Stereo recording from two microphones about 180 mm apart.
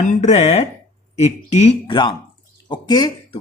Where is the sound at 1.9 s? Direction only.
25° left (ahead or behind).